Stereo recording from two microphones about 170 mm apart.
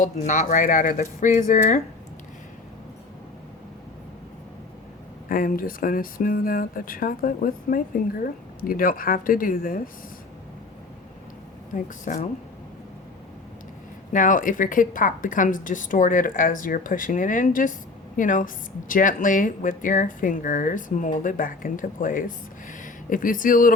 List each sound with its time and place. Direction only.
0.0 s a woman's voice: 50° left (ahead or behind)
5.3 s speech: 55° left (ahead or behind)
11.7 s a woman's voice: 50° left (ahead or behind)
14.1 s a woman's voice: 50° left (ahead or behind)